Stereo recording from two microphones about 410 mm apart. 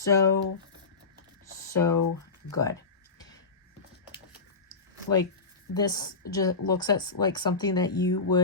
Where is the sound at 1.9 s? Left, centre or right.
Left.